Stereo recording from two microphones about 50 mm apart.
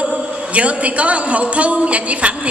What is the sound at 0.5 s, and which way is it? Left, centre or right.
A woman's voice, right.